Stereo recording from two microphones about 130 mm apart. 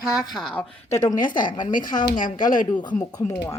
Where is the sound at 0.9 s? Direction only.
30° left (ahead or behind).